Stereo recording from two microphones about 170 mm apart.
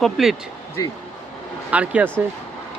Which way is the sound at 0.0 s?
Centre (ahead or behind).